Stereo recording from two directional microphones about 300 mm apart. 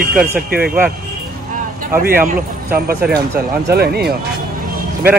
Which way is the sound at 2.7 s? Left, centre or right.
Right.